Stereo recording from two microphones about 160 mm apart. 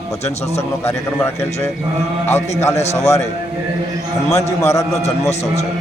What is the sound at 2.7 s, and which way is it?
Speech, 45° left (ahead or behind).